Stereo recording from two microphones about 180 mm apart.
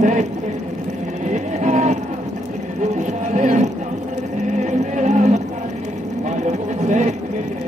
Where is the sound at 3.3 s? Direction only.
45° right (ahead or behind).